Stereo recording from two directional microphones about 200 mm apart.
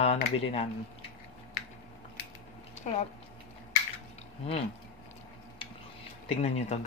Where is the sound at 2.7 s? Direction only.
35° left (ahead or behind).